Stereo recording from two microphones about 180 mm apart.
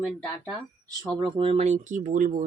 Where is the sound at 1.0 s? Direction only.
25° right (ahead or behind); by 2.4 s 45° right (ahead or behind).